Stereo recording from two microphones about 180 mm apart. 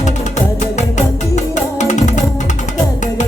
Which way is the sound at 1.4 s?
40° left (ahead or behind).